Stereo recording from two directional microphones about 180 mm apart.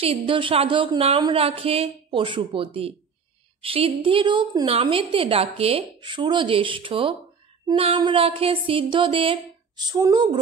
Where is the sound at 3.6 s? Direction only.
30° right (ahead or behind).